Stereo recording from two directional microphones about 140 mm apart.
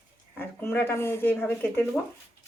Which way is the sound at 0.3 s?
15° left (ahead or behind).